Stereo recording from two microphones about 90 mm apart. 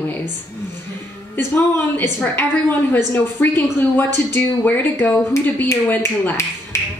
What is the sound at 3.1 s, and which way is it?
A woman's voice, 20° left (ahead or behind).